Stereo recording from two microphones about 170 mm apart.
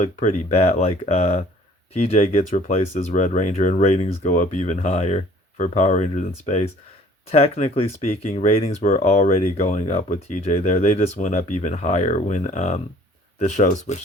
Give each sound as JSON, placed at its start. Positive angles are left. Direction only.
{"t": 0.0, "sound": "speech", "side_deg": 45}